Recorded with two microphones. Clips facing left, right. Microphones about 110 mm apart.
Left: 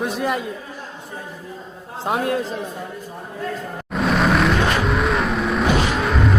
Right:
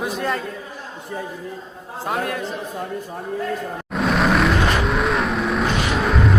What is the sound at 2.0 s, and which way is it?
Speech, 20° left (ahead or behind).